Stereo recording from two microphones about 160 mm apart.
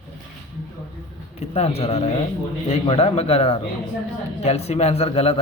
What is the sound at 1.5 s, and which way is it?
Speech, 40° left (ahead or behind).